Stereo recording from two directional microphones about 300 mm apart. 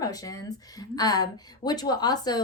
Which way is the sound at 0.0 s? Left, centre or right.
Centre.